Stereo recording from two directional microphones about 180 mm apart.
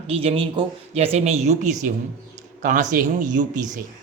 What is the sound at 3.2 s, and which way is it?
Speech, 45° right (ahead or behind).